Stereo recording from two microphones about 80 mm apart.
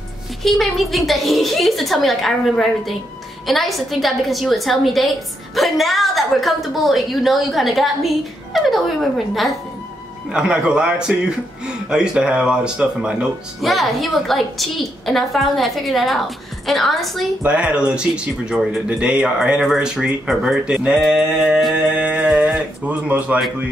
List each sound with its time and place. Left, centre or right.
0.4 s a woman's voice: centre
10.3 s speech: centre
13.6 s a woman's voice: centre
17.4 s speech: centre
21.9 s speech: centre